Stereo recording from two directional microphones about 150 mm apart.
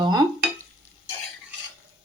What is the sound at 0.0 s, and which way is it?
Stir, 25° right (ahead or behind).